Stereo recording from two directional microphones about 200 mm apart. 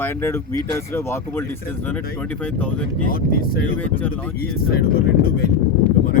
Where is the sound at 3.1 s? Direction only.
45° left (ahead or behind).